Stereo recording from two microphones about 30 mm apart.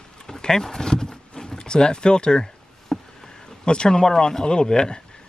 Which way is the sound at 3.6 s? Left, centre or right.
Left.